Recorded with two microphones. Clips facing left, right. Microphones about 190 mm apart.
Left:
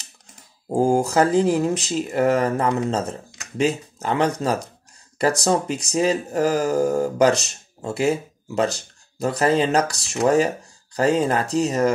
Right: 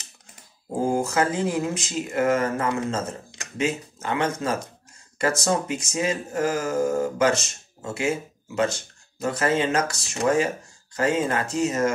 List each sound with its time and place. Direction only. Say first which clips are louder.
0.8 s speech: left 4 dB; 35° left (ahead or behind)